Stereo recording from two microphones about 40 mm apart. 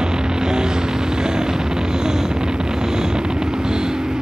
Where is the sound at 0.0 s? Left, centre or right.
Centre.